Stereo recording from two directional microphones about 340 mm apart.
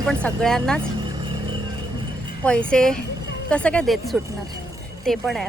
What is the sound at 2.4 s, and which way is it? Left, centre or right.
Speech, centre.